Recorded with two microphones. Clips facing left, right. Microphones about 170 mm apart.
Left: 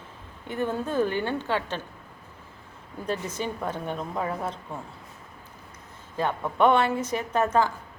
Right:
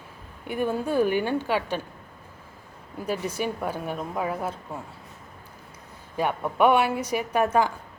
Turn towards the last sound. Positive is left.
turn(degrees=-15)  # may be behind; listen again after turning